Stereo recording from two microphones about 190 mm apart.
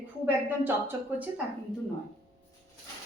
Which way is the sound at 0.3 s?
10° right (ahead or behind).